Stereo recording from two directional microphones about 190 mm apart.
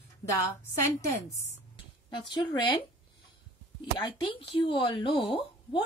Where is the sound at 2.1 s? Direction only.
25° left (ahead or behind).